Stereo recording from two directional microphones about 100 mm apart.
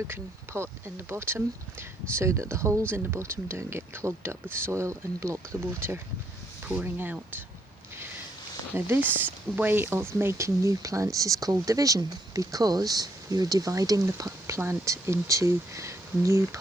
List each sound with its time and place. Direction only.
0.1 s speech: 25° right (ahead or behind)
8.7 s speech: 20° right (ahead or behind)